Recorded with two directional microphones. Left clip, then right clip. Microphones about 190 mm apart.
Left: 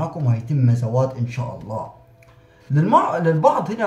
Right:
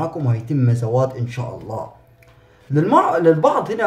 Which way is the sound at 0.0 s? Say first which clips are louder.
Right 3 dB; 40° right (ahead or behind).